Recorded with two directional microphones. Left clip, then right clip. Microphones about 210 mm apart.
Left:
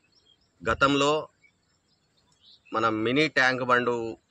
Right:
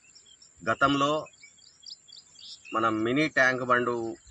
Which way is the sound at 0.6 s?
30° left (ahead or behind).